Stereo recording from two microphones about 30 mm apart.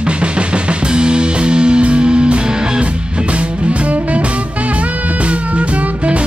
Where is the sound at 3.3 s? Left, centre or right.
Right.